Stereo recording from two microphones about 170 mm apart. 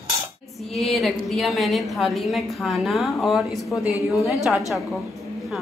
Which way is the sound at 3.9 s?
20° left (ahead or behind).